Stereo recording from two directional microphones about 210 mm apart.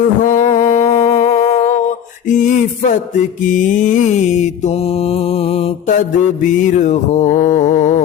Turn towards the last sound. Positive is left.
turn(degrees=35)  # may be behind; listen again after turning